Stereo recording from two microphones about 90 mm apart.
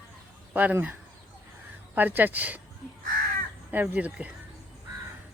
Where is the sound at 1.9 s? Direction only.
20° right (ahead or behind).